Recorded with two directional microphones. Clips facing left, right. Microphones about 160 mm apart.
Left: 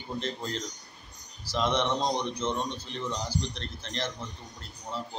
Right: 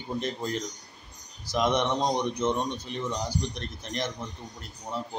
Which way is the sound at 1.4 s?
20° right (ahead or behind).